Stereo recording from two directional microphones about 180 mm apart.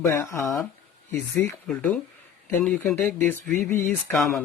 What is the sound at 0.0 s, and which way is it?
Speech, 15° left (ahead or behind).